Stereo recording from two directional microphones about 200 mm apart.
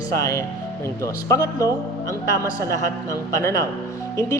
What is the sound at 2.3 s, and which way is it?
Speech, 15° left (ahead or behind).